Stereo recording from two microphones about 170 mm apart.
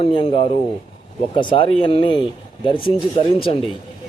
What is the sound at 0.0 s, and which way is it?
A man's voice, 30° left (ahead or behind).